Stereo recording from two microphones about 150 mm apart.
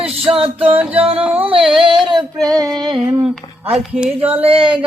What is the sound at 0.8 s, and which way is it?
Music, 10° right (ahead or behind).